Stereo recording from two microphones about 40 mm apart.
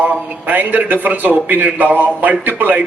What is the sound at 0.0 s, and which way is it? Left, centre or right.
A man's voice, right.